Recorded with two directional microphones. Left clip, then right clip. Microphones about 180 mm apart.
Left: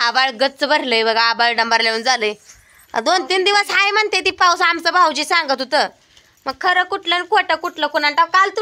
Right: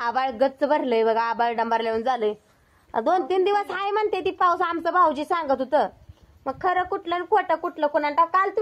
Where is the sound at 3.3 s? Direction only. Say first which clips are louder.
Left 6 dB; 10° left (ahead or behind).